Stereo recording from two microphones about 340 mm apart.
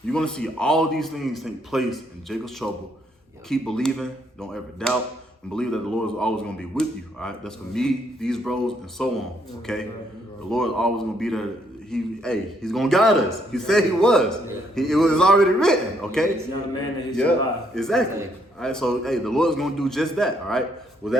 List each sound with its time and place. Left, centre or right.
0.1 s speech: centre